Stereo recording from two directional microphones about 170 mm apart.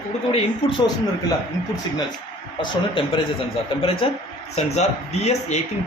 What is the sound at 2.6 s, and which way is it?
Speech, 30° left (ahead or behind).